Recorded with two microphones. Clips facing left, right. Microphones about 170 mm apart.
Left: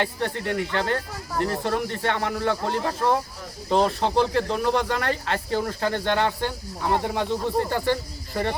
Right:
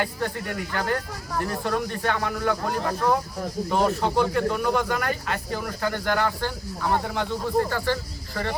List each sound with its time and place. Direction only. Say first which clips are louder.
0.0 s speech: left 2 dB; 25° left (ahead or behind)